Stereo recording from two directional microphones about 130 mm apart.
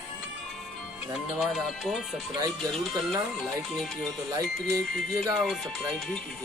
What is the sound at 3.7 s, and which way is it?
Speech, 5° left (ahead or behind).